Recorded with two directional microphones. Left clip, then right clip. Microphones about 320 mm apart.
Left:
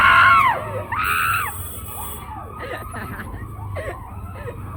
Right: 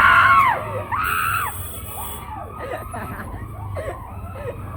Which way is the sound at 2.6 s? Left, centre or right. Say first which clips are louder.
Right 1 dB; centre.